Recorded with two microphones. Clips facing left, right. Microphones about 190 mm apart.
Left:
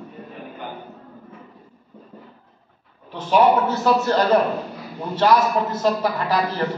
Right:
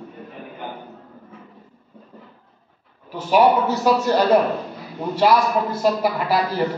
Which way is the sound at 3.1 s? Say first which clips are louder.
Right 1 dB; 10° right (ahead or behind).